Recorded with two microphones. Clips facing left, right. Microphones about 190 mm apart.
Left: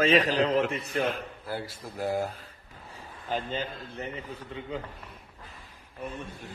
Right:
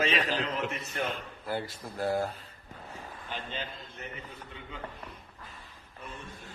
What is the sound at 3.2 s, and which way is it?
Speech, 45° left (ahead or behind).